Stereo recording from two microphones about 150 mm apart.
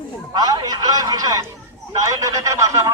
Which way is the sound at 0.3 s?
25° right (ahead or behind).